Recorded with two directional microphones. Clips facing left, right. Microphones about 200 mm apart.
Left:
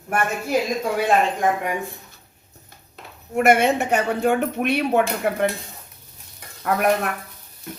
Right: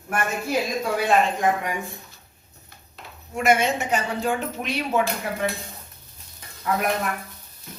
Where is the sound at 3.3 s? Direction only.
60° left (ahead or behind).